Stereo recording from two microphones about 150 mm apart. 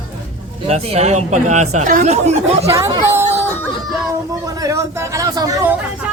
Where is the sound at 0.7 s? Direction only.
45° right (ahead or behind).